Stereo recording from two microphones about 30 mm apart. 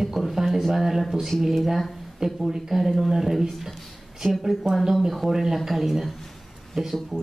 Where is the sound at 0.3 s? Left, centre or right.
Centre.